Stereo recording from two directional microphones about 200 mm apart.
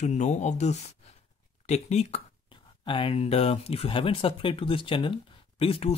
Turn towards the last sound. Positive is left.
turn(degrees=30)  # may be behind; listen again after turning